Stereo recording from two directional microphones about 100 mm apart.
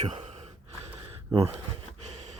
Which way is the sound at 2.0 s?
90° right.